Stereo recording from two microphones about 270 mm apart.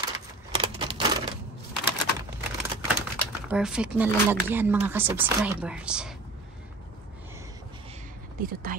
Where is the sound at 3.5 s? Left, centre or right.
Centre.